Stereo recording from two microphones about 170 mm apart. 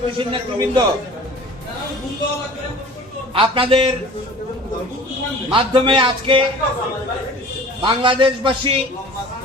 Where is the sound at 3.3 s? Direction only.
30° right (ahead or behind).